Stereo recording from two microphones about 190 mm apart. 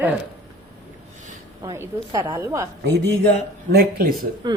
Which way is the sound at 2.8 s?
60° right (ahead or behind).